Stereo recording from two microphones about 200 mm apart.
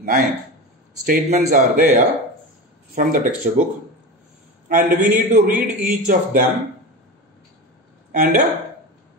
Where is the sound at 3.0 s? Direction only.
40° right (ahead or behind).